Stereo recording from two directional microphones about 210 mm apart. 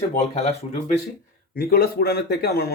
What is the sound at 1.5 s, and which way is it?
Speech, 45° left (ahead or behind).